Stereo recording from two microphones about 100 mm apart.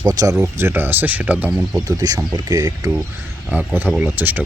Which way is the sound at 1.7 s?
40° right (ahead or behind).